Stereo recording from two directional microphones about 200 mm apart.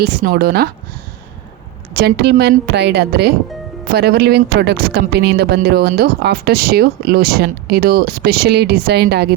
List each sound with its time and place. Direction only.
0.0 s speech: 50° right (ahead or behind)
2.0 s a woman's voice: 55° right (ahead or behind)